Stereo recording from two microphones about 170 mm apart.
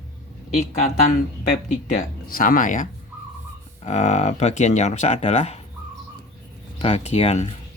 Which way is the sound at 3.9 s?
45° left (ahead or behind).